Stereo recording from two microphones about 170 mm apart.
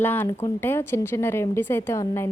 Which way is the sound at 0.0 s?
10° left (ahead or behind).